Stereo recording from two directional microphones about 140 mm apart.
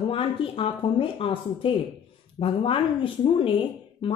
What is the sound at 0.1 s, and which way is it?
Speech, 40° left (ahead or behind).